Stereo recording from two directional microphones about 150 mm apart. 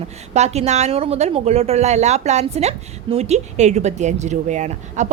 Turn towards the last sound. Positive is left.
turn(degrees=-50)  # may be behind; listen again after turning